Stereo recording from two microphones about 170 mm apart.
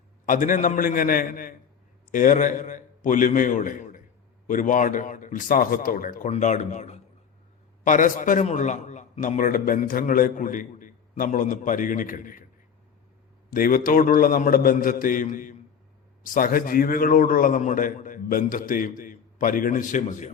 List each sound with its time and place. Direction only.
0.3 s a man's voice: 50° left (ahead or behind)
13.5 s a man's voice: 55° left (ahead or behind)